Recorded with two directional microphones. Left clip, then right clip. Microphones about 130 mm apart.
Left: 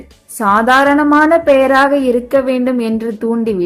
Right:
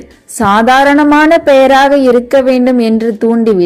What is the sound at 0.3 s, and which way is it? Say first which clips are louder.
A woman's voice: right 3 dB; 20° right (ahead or behind).